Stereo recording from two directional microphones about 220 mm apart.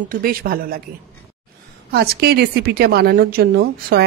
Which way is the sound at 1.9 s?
45° right (ahead or behind).